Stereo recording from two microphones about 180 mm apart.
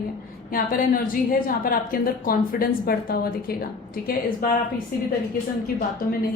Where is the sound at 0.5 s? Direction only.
50° left (ahead or behind).